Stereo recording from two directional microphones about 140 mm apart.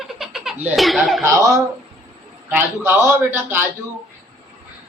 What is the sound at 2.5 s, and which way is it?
A man's voice, 15° right (ahead or behind).